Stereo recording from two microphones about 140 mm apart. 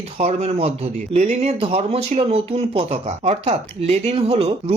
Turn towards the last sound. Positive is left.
turn(degrees=-45)  # may be behind; listen again after turning